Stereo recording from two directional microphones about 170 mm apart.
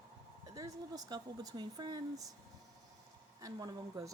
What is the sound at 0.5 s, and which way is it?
Speech, 20° right (ahead or behind).